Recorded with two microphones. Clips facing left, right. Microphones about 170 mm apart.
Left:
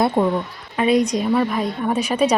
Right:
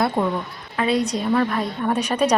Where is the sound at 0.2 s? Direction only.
10° left (ahead or behind).